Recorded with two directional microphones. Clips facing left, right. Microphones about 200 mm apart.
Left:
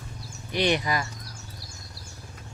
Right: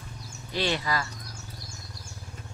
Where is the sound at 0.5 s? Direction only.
20° left (ahead or behind).